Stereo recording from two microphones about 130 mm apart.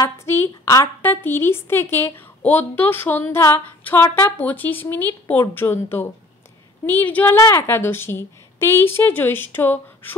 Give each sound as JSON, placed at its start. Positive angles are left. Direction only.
{"t": 0.0, "sound": "a woman's voice", "side_deg": 20}